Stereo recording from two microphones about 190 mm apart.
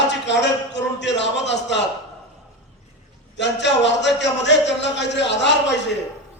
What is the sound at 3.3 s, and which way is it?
A man's voice, 65° left (ahead or behind).